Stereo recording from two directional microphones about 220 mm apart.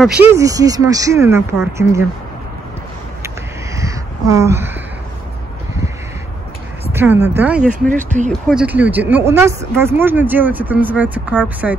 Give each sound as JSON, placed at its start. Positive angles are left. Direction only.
{"t": 0.0, "sound": "speech", "side_deg": -5}
{"t": 3.7, "sound": "crow", "side_deg": -15}
{"t": 6.9, "sound": "speech", "side_deg": -10}
{"t": 7.9, "sound": "speech", "side_deg": -35}
{"t": 8.3, "sound": "speech", "side_deg": 0}